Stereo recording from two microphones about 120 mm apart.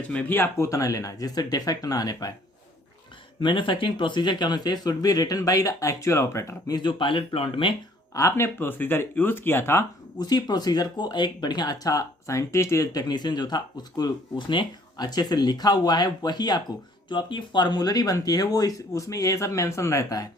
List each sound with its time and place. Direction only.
0.1 s speech: 15° left (ahead or behind); by 2.3 s 30° left (ahead or behind)
3.4 s speech: 45° left (ahead or behind); by 6.7 s 25° left (ahead or behind)
6.7 s speech: 40° left (ahead or behind)
8.1 s speech: 25° left (ahead or behind)
10.2 s speech: 35° left (ahead or behind)